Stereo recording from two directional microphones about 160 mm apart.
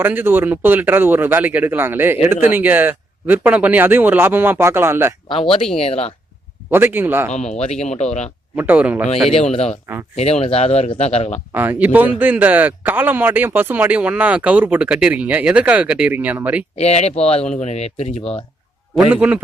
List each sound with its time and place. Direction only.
0.0 s speech: 10° right (ahead or behind)
5.7 s speech: 40° left (ahead or behind)
6.7 s speech: 15° right (ahead or behind)
7.3 s speech: 45° left (ahead or behind)
8.5 s speech: 10° right (ahead or behind)
9.3 s speech: 40° left (ahead or behind)
11.5 s speech: 10° right (ahead or behind)
16.7 s speech: 40° left (ahead or behind)
18.9 s speech: 10° right (ahead or behind)